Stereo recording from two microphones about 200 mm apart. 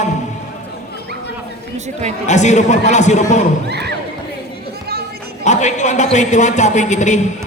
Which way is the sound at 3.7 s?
55° right (ahead or behind).